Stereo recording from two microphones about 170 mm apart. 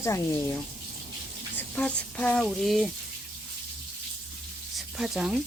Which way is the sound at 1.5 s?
5° left (ahead or behind).